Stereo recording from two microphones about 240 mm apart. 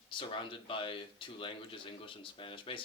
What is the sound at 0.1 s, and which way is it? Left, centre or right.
Speech, left.